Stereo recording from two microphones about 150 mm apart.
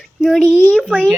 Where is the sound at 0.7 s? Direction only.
5° right (ahead or behind).